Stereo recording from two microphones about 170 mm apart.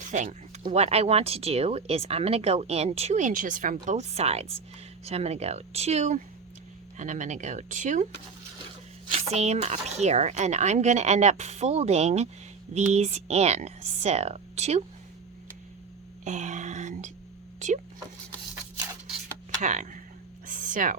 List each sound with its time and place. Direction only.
0.0 s speech: 50° right (ahead or behind)
0.6 s speech: 40° right (ahead or behind)
9.1 s speech: 40° right (ahead or behind)
16.2 s speech: 45° right (ahead or behind)
19.6 s speech: 45° right (ahead or behind)
20.5 s a sound: 50° right (ahead or behind)